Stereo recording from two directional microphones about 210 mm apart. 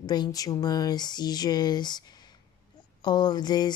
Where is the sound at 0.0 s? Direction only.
20° left (ahead or behind).